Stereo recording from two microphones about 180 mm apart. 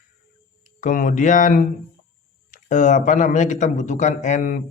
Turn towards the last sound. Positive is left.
turn(degrees=45)  # may be behind; listen again after turning